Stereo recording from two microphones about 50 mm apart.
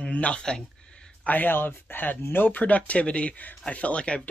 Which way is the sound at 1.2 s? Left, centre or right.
Left.